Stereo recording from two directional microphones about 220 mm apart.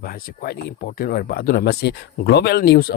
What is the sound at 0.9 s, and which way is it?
Speech, 45° left (ahead or behind).